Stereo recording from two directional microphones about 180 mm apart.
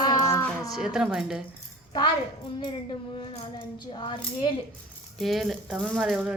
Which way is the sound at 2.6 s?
30° left (ahead or behind).